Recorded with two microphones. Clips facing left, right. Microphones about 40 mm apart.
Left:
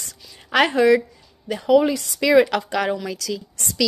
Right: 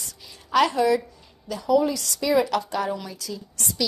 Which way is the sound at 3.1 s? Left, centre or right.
Left.